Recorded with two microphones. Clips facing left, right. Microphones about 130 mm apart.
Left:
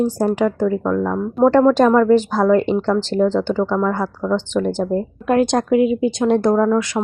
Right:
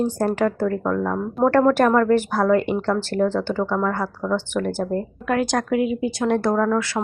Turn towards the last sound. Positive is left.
turn(degrees=15)  # may be behind; listen again after turning